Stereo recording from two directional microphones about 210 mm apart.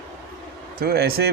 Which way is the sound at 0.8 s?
50° right (ahead or behind).